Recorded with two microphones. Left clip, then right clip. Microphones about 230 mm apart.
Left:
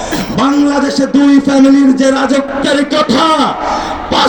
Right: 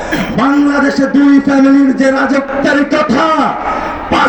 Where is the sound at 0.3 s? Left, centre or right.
Left.